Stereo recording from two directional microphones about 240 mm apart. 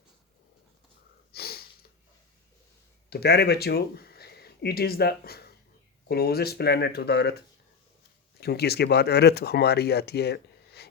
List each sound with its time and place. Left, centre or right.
1.3 s sniff: left
3.1 s speech: left
8.4 s speech: left